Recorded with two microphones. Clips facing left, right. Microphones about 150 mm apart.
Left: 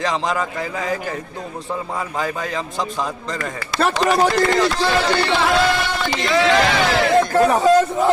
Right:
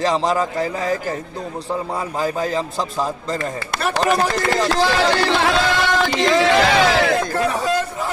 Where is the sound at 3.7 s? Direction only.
55° right (ahead or behind).